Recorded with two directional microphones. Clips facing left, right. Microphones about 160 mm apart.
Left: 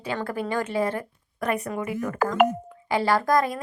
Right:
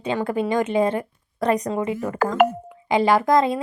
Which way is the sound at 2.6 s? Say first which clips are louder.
Right 5 dB; 15° right (ahead or behind).